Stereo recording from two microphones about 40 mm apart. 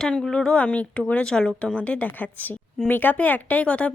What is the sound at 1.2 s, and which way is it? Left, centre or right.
Speech, centre.